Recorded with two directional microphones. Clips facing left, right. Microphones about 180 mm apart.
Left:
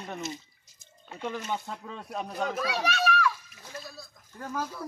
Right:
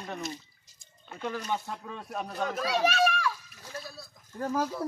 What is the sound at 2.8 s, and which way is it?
Children playing, 35° right (ahead or behind).